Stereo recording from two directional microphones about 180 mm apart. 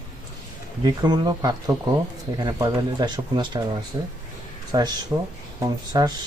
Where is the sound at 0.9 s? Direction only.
20° right (ahead or behind).